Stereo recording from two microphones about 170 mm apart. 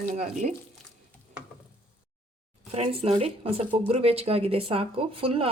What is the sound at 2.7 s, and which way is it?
Speech, 35° right (ahead or behind).